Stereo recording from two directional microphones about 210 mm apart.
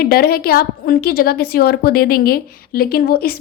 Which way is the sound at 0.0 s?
45° left (ahead or behind).